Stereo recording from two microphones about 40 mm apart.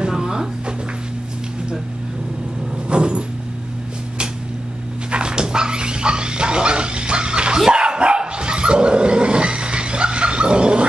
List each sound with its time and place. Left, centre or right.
0.1 s music: centre
2.9 s vehicle: right
5.1 s dog: right